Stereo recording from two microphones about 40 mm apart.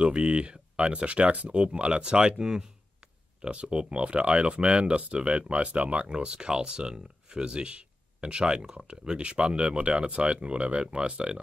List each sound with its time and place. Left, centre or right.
0.0 s speech: right